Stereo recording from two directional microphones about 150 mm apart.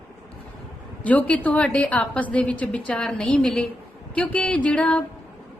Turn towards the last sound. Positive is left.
turn(degrees=5)  # may be behind; listen again after turning